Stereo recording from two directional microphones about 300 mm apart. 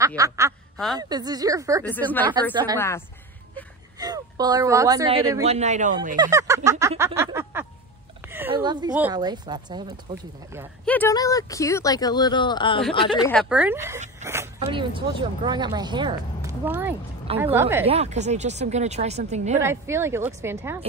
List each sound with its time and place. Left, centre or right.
0.0 s speech: centre
1.9 s speech: centre
2.5 s speech: centre
4.0 s speech: centre
5.5 s speech: right
6.1 s speech: centre
10.9 s speech: centre
13.3 s speech: centre
17.8 s speech: right
19.6 s speech: centre